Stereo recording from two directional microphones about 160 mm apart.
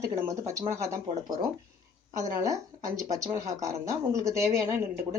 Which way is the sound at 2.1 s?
20° right (ahead or behind).